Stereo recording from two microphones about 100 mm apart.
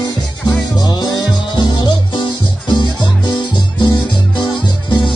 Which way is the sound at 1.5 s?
45° left (ahead or behind).